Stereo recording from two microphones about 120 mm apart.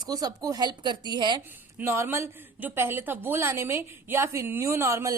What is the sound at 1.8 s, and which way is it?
Speech, 20° right (ahead or behind).